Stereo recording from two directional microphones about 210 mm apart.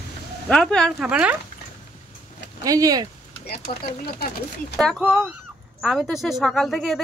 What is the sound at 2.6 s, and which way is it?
Speech, 15° right (ahead or behind).